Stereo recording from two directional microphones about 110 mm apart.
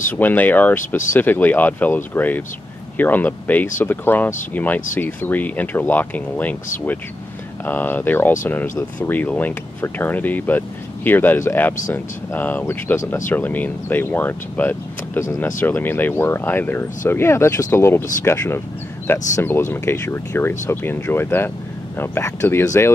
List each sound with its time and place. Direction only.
0.2 s speech: 15° left (ahead or behind)